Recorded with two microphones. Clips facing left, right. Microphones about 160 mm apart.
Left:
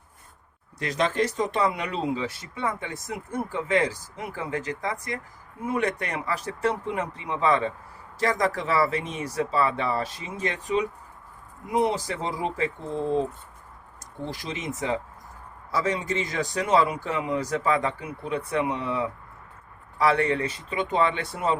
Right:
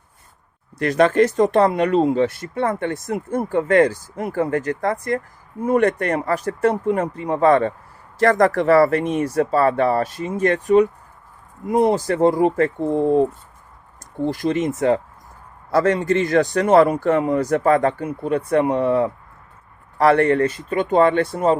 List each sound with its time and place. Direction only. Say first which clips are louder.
0.8 s speech: right 10 dB; 60° right (ahead or behind)
14.3 s speech: right 13 dB; 55° right (ahead or behind)